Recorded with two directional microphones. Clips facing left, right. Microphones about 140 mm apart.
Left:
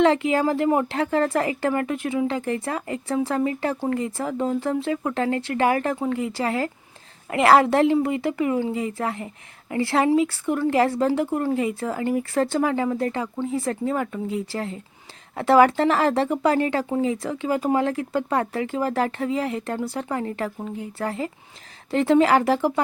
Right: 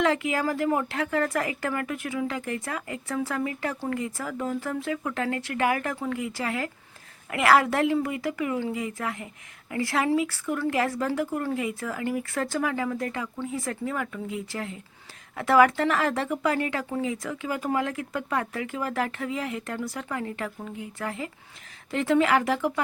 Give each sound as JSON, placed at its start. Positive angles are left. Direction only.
{"t": 0.0, "sound": "speech", "side_deg": 30}